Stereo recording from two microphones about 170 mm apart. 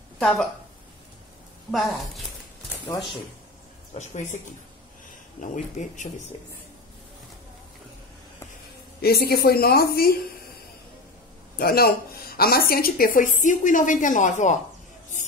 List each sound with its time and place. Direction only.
0.2 s speech: centre (ahead or behind)
1.7 s a woman's voice: centre (ahead or behind)
3.9 s speech: 45° left (ahead or behind)
5.4 s speech: 50° left (ahead or behind)
9.0 s a woman's voice: 65° left (ahead or behind)
11.5 s a woman's voice: 65° left (ahead or behind); by 14.6 s 45° left (ahead or behind)